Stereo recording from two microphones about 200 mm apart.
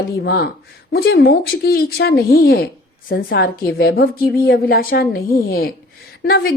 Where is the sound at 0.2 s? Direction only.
55° left (ahead or behind).